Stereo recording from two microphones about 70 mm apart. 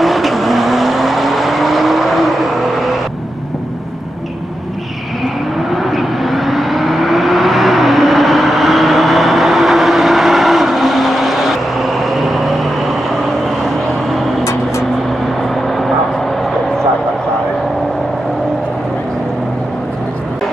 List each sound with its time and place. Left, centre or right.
0.0 s vehicle: centre
5.8 s vehicle: centre
14.4 s vehicle: left